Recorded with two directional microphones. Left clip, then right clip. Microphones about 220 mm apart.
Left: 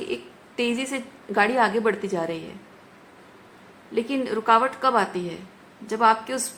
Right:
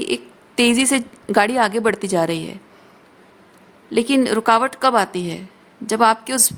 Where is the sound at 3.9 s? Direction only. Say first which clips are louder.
Right 8 dB; 55° right (ahead or behind).